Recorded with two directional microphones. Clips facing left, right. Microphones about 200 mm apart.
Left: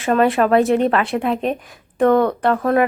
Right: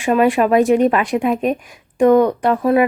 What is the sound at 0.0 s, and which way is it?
A woman's voice, 15° right (ahead or behind).